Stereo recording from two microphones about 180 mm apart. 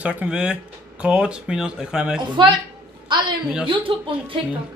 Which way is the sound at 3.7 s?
30° right (ahead or behind).